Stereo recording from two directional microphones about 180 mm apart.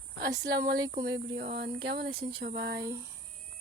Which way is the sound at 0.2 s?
65° right (ahead or behind).